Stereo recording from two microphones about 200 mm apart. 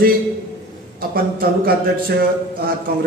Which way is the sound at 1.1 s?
45° right (ahead or behind).